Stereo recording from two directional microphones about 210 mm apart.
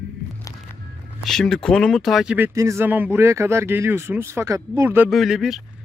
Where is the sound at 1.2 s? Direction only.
Centre (ahead or behind).